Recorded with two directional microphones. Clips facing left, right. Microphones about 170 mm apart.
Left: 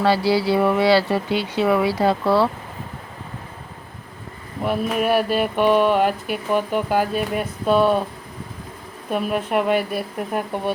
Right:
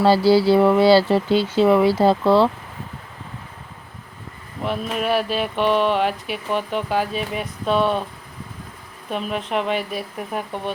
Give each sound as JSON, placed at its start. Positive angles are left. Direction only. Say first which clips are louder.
{"t": 0.0, "sound": "speech", "louder": "right 4 dB", "side_deg": -30}
{"t": 2.2, "sound": "speech", "louder": "right 2 dB", "side_deg": 5}
{"t": 4.6, "sound": "speech", "louder": "left 3 dB", "side_deg": 5}
{"t": 5.1, "sound": "speech", "louder": "left 2 dB", "side_deg": 50}
{"t": 5.5, "sound": "speech", "louder": "left 2 dB", "side_deg": 10}
{"t": 6.0, "sound": "speech", "louder": "left 2 dB", "side_deg": 45}
{"t": 6.3, "sound": "speech", "louder": "left 3 dB", "side_deg": 5}
{"t": 9.0, "sound": "speech", "louder": "left 3 dB", "side_deg": 5}